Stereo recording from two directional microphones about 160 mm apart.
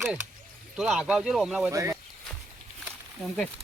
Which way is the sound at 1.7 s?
15° right (ahead or behind).